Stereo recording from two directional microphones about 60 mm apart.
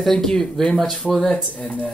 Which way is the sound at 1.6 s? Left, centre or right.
Left.